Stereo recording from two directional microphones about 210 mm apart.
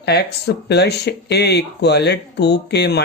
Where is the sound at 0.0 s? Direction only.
50° left (ahead or behind).